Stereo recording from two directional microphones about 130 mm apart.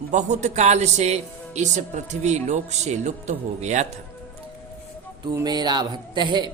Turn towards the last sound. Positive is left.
turn(degrees=-35)  # may be behind; listen again after turning